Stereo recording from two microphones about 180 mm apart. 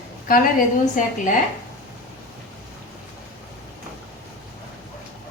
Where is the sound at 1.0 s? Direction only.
45° left (ahead or behind).